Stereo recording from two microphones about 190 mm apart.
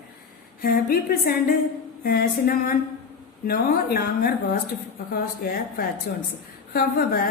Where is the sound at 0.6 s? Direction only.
50° left (ahead or behind).